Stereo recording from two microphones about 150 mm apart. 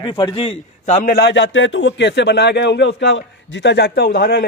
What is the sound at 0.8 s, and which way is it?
Speech, 80° left.